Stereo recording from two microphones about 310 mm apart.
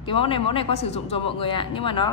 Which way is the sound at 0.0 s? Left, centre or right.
Centre.